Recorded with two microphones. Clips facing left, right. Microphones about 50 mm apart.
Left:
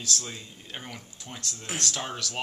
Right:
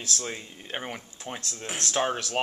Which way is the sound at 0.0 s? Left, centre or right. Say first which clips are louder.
Right 1 dB; right.